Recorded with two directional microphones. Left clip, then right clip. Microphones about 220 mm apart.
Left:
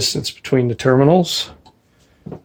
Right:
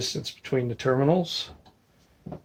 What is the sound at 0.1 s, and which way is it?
Speech, 45° left (ahead or behind).